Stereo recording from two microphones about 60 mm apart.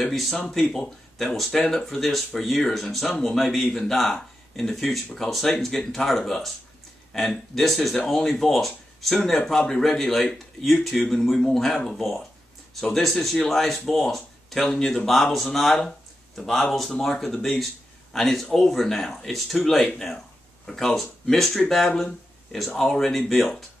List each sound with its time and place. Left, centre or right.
0.0 s speech: centre